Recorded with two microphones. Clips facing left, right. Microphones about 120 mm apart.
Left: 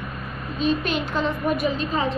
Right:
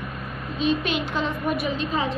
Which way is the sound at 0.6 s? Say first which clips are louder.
Left 1 dB; centre (ahead or behind).